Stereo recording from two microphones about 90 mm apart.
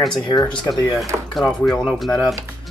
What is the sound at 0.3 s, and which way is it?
Speech, 50° left (ahead or behind).